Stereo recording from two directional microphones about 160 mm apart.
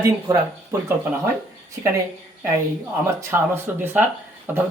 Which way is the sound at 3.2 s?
15° right (ahead or behind).